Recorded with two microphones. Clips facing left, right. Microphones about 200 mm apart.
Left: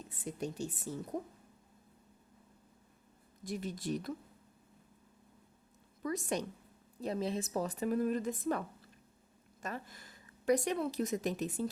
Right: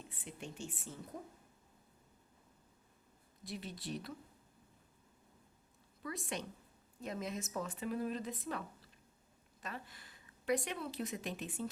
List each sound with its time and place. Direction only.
0.1 s a woman's voice: 40° left (ahead or behind)
3.4 s a woman's voice: 45° left (ahead or behind)
6.0 s a woman's voice: 45° left (ahead or behind)